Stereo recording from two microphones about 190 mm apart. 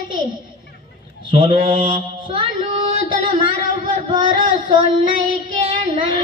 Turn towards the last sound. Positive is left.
turn(degrees=-25)  # may be behind; listen again after turning